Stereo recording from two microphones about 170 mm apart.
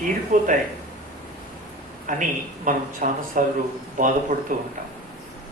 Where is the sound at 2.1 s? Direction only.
50° right (ahead or behind).